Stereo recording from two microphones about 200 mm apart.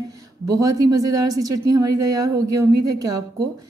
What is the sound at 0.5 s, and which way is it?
A woman's voice, 15° right (ahead or behind).